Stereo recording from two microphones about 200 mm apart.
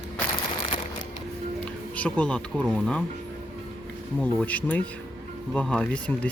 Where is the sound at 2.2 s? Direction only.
5° left (ahead or behind).